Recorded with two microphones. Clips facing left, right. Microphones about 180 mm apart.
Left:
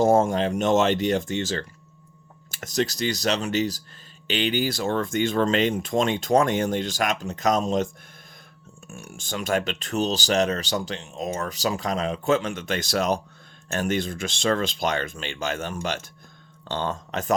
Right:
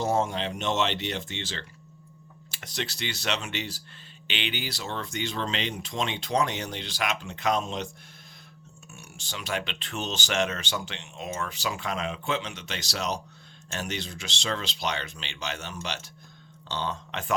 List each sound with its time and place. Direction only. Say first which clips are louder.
0.0 s speech: left 8 dB; 50° left (ahead or behind)
8.9 s speech: left 8 dB; 50° left (ahead or behind)